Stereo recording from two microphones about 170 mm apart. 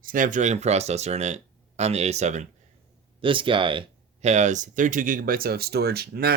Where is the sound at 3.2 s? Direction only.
30° right (ahead or behind); by 6.3 s 65° right (ahead or behind).